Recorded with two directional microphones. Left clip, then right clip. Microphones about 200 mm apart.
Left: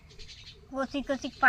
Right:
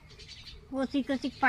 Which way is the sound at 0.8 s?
20° left (ahead or behind).